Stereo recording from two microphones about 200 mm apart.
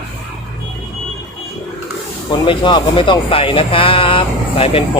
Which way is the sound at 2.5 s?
25° left (ahead or behind).